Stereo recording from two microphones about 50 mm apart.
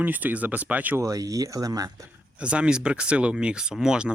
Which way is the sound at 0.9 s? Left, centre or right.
Right.